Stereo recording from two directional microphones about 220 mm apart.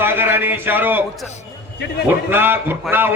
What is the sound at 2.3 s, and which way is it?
Speech, 10° right (ahead or behind).